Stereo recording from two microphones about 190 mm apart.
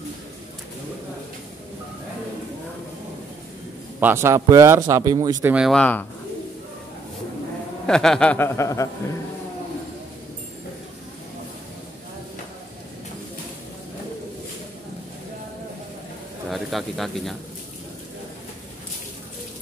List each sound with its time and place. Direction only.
4.0 s speech: 15° right (ahead or behind)
5.5 s speech: centre (ahead or behind)
7.8 s a sound: 5° left (ahead or behind)
16.4 s speech: centre (ahead or behind)